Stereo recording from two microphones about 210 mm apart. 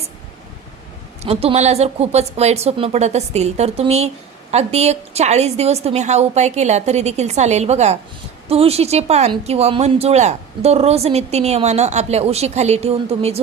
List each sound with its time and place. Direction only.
1.2 s a woman's voice: 30° right (ahead or behind)